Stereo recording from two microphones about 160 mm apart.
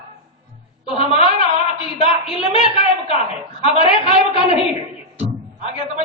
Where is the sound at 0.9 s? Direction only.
35° left (ahead or behind).